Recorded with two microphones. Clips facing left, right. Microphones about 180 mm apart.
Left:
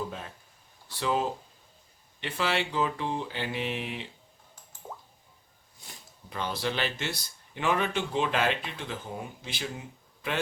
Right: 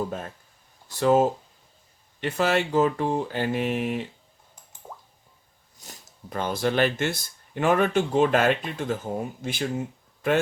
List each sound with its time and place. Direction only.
0.1 s speech: 50° right (ahead or behind)
4.8 s drip: centre (ahead or behind)
5.8 s speech: 45° right (ahead or behind)